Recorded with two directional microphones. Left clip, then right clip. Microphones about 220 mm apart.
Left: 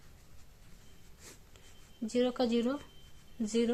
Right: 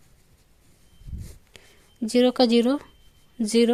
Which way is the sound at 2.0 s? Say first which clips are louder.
Right 11 dB; 40° right (ahead or behind).